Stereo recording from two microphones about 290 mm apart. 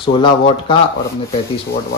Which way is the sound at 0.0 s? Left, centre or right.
Centre.